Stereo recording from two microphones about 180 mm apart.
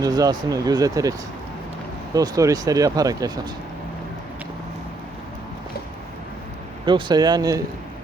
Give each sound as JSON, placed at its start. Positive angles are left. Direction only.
{"t": 0.0, "sound": "speech", "side_deg": -20}
{"t": 2.1, "sound": "speech", "side_deg": -20}
{"t": 6.8, "sound": "speech", "side_deg": -25}